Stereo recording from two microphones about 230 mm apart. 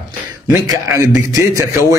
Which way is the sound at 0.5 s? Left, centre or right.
Centre.